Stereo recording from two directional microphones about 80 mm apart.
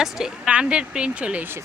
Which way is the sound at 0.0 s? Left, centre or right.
Centre.